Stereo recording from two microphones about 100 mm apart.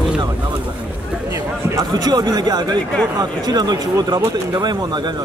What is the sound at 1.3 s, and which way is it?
Speech, 40° right (ahead or behind).